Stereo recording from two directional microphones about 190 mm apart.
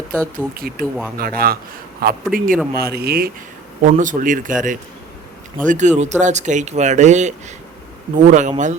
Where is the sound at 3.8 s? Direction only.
40° right (ahead or behind).